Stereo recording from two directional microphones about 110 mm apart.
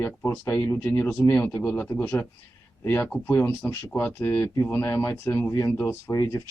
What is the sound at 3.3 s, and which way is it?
Speech, 25° left (ahead or behind).